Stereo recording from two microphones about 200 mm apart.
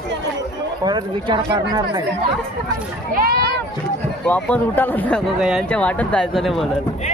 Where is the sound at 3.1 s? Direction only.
50° right (ahead or behind).